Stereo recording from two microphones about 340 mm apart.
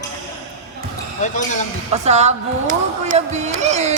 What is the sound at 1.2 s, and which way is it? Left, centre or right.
Speech, left.